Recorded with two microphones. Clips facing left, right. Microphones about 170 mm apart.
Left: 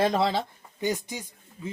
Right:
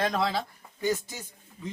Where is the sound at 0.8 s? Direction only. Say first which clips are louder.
Even; 20° left (ahead or behind).